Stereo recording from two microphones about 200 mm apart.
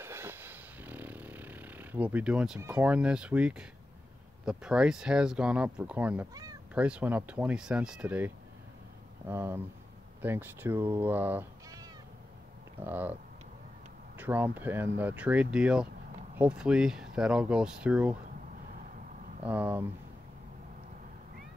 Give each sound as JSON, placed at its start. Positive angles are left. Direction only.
{"t": 0.0, "sound": "a sound", "side_deg": -10}
{"t": 2.6, "sound": "speech", "side_deg": -5}
{"t": 6.3, "sound": "cat", "side_deg": -20}
{"t": 6.7, "sound": "speech", "side_deg": -5}
{"t": 9.3, "sound": "speech", "side_deg": -10}
{"t": 14.1, "sound": "speech", "side_deg": -10}
{"t": 19.4, "sound": "speech", "side_deg": -10}